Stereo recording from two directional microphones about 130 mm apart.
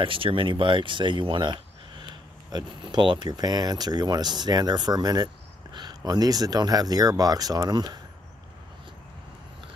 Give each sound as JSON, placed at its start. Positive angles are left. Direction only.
{"t": 0.0, "sound": "speech", "side_deg": -40}